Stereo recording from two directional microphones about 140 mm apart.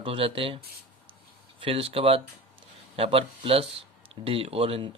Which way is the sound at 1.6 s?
40° right (ahead or behind).